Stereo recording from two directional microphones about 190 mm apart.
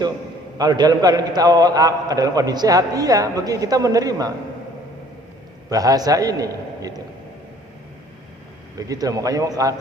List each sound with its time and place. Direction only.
0.6 s a man's voice: 20° right (ahead or behind)
5.7 s a man's voice: 20° right (ahead or behind)
8.8 s a man's voice: 20° right (ahead or behind)